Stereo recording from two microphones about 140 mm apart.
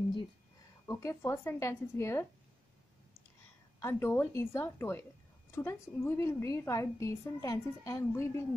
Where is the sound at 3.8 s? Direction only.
15° left (ahead or behind).